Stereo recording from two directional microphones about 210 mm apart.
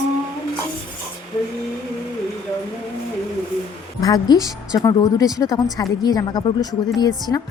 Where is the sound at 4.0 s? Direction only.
15° left (ahead or behind).